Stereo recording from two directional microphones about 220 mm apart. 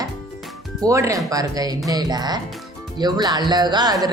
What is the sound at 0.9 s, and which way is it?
A woman's voice, 15° right (ahead or behind).